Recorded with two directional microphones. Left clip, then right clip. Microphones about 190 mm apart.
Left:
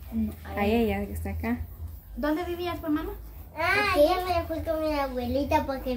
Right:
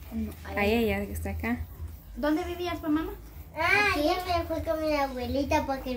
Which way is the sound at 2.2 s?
20° left (ahead or behind).